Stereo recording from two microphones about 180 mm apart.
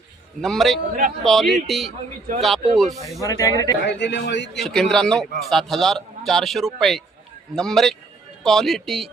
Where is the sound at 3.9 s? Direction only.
75° left (ahead or behind).